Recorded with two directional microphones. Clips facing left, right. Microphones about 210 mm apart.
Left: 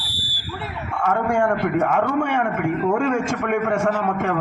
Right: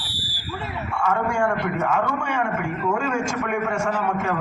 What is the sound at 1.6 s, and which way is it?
A man's voice, 55° left (ahead or behind).